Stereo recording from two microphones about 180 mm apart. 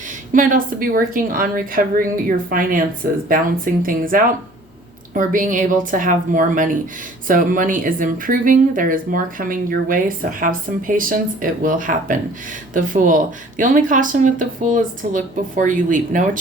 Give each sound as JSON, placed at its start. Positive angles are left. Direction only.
{"t": 0.3, "sound": "speech", "side_deg": -50}